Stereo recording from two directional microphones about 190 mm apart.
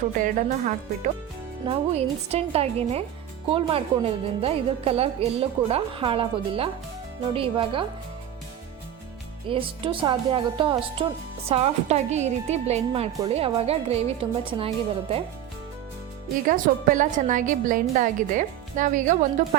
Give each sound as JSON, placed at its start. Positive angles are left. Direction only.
{"t": 0.2, "sound": "a woman's voice", "side_deg": -45}
{"t": 9.5, "sound": "a woman's voice", "side_deg": -30}
{"t": 16.5, "sound": "a woman's voice", "side_deg": -45}